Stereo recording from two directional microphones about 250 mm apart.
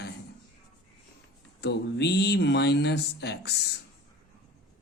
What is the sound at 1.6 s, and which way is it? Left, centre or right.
Speech, left.